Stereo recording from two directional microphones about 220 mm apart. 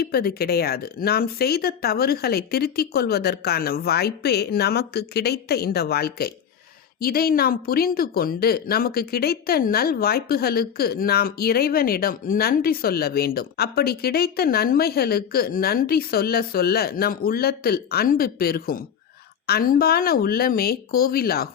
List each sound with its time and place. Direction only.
0.0 s a woman's voice: 45° left (ahead or behind)